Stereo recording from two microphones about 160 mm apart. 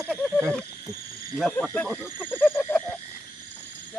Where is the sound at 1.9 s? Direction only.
15° right (ahead or behind).